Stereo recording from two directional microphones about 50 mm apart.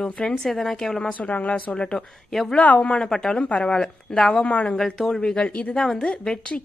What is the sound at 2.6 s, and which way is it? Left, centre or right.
Speech, left.